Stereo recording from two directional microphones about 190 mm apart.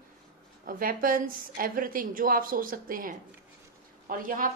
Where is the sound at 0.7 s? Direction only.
50° right (ahead or behind).